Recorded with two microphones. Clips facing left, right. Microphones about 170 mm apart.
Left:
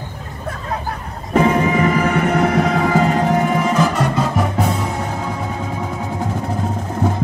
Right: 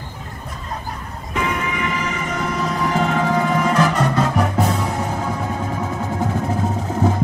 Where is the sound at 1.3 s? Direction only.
35° left (ahead or behind); by 3.0 s 65° left (ahead or behind).